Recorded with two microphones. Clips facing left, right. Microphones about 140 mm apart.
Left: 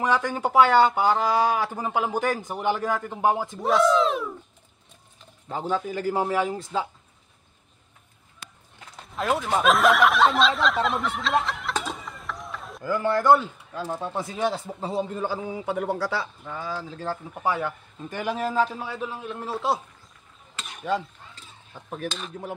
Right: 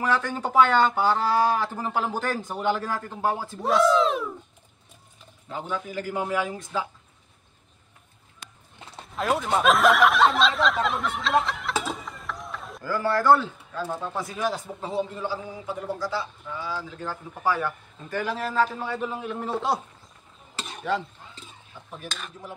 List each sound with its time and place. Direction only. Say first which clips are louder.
0.0 s speech: left 2 dB; 15° left (ahead or behind)
3.6 s speech: even; centre (ahead or behind)
5.5 s a man's voice: left 4 dB; 35° left (ahead or behind)
9.1 s speech: even; centre (ahead or behind)
12.8 s speech: left 1 dB; 20° left (ahead or behind)
15.0 s a man's voice: left 1 dB; 45° left (ahead or behind)
15.5 s speech: left 5 dB; 65° left (ahead or behind); by 19.8 s centre (ahead or behind)
20.5 s a sound: right 3 dB; 30° right (ahead or behind)